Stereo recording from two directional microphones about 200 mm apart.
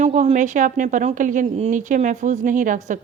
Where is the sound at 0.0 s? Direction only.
35° right (ahead or behind).